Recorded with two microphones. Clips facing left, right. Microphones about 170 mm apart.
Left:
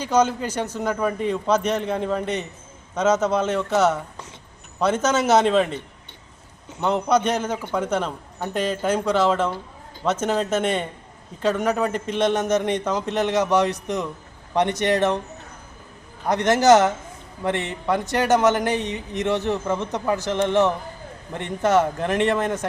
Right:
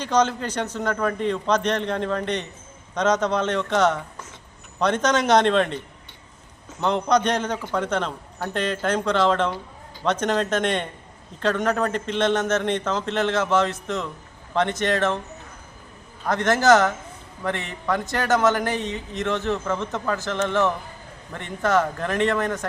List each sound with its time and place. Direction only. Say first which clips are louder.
0.0 s a man's voice: left 1 dB; 10° left (ahead or behind)
16.2 s a man's voice: left 2 dB; 20° left (ahead or behind)